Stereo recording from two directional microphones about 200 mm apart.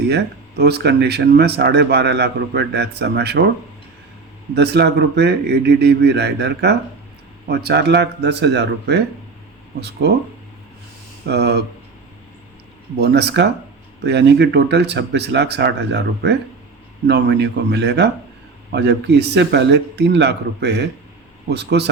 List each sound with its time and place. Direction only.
0.1 s speech: 55° right (ahead or behind)
4.5 s speech: 55° right (ahead or behind)
11.3 s speech: 55° right (ahead or behind)
13.0 s speech: 55° right (ahead or behind)